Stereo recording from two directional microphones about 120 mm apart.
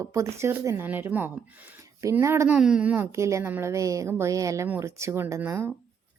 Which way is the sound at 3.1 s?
25° right (ahead or behind).